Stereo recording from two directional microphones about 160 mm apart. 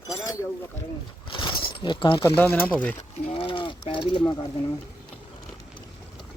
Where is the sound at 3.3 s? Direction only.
30° left (ahead or behind).